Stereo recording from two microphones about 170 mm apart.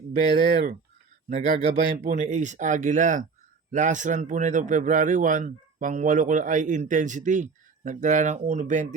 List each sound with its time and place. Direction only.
0.2 s a man's voice: 55° right (ahead or behind)